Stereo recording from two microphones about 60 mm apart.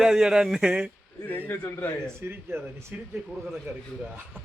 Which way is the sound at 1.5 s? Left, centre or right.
Left.